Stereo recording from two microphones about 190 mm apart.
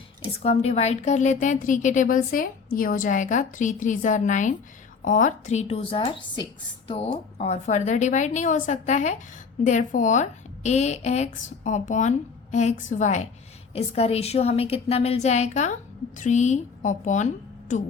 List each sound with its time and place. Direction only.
0.3 s a woman's voice: 35° left (ahead or behind)